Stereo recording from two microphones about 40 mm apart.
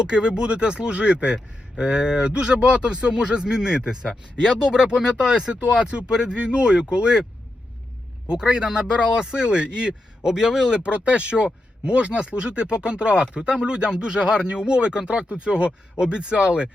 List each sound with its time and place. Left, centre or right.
0.0 s speech: right
8.3 s speech: centre
10.8 s speech: right